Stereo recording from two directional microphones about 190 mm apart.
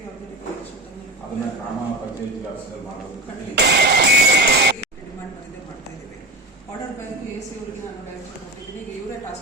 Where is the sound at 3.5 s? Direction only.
60° right (ahead or behind).